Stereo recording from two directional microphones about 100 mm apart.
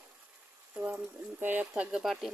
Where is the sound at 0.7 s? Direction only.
15° right (ahead or behind).